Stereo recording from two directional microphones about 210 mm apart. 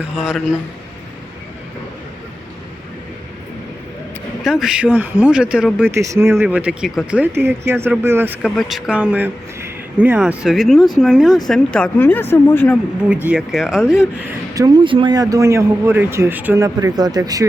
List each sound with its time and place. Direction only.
0.2 s speech: 5° right (ahead or behind)
4.4 s speech: centre (ahead or behind)
13.2 s speech: 5° right (ahead or behind)
14.5 s speech: 20° right (ahead or behind)